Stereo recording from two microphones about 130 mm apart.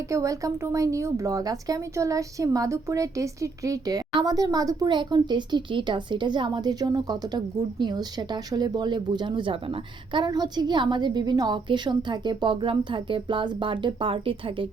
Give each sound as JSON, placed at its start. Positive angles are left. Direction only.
{"t": 0.1, "sound": "speech", "side_deg": -25}